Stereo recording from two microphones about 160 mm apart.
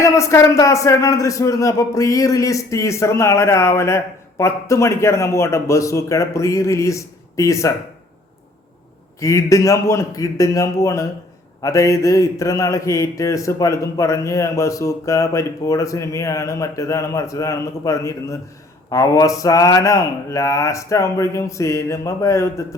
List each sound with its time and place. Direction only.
0.0 s speech: 20° left (ahead or behind)
9.2 s speech: 20° left (ahead or behind)